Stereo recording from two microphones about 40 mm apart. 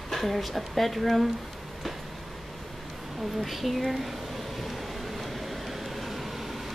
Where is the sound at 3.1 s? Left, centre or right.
Centre.